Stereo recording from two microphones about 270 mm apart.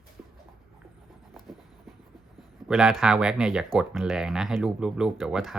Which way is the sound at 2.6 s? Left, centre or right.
Centre.